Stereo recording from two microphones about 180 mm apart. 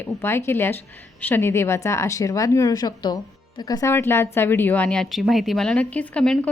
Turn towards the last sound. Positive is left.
turn(degrees=5)  # may be behind; listen again after turning